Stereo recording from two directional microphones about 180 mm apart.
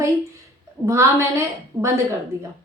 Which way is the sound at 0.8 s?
15° right (ahead or behind).